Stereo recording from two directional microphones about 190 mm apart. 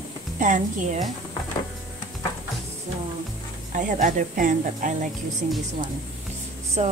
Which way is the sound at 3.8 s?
45° right (ahead or behind).